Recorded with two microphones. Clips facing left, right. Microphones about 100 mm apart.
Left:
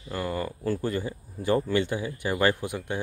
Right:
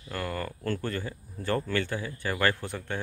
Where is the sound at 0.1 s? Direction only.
10° left (ahead or behind).